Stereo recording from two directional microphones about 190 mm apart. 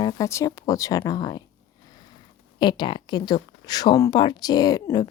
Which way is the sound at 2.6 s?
25° left (ahead or behind).